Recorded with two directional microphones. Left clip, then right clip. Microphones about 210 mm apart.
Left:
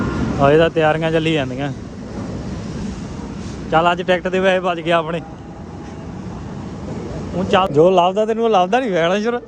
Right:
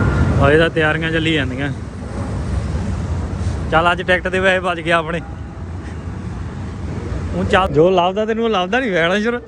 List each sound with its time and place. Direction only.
0.3 s speech: 15° left (ahead or behind)
3.7 s speech: 5° left (ahead or behind)
7.3 s speech: 15° left (ahead or behind)